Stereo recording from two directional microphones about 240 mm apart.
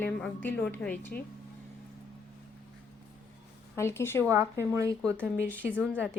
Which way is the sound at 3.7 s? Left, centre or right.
Centre.